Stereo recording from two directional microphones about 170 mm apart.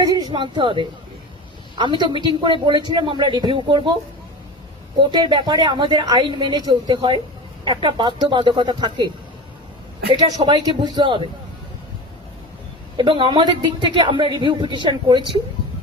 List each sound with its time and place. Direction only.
0.0 s a woman's voice: 20° right (ahead or behind)
4.9 s a woman's voice: 25° right (ahead or behind)
10.2 s a woman's voice: 25° right (ahead or behind)
13.0 s a woman's voice: 30° right (ahead or behind)